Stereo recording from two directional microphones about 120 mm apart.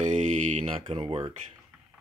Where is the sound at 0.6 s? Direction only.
50° right (ahead or behind).